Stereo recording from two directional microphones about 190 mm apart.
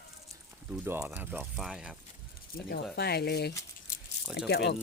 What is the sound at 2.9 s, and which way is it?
Speech, 55° left (ahead or behind).